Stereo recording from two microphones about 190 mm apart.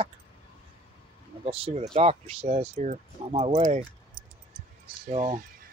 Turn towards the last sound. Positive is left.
turn(degrees=-40)  # may be behind; listen again after turning